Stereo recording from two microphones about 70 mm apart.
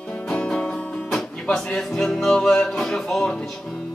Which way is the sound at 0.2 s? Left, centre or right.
Centre.